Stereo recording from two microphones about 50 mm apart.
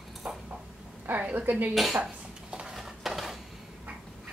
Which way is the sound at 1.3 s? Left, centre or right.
Right.